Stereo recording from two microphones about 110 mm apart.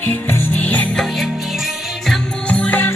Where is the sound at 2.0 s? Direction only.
10° left (ahead or behind).